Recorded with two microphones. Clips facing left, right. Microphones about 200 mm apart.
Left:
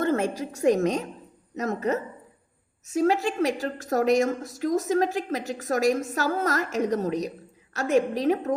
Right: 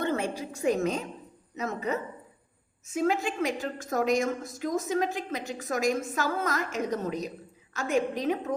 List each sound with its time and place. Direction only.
0.0 s a woman's voice: 45° left (ahead or behind)